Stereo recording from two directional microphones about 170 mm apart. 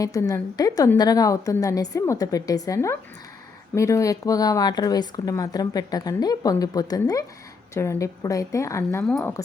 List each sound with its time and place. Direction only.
0.0 s speech: 20° left (ahead or behind)
9.0 s a woman's voice: 5° left (ahead or behind)